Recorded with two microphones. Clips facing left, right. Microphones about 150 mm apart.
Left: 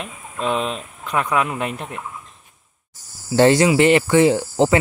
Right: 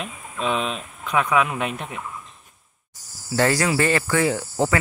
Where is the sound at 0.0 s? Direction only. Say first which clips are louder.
Left 2 dB; 15° left (ahead or behind).